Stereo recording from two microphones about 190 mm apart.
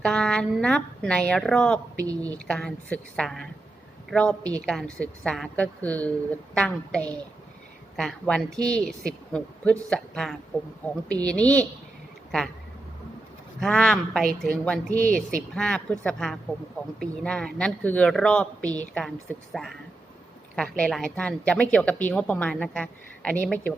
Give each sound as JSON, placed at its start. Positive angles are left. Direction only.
{"t": 0.0, "sound": "a man's voice", "side_deg": 5}
{"t": 13.6, "sound": "a man's voice", "side_deg": 5}
{"t": 20.7, "sound": "a woman's voice", "side_deg": 5}